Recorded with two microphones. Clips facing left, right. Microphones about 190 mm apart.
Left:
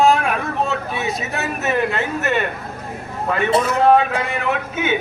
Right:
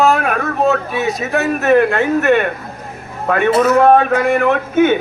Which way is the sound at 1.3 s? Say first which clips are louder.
Right 11 dB; 55° right (ahead or behind).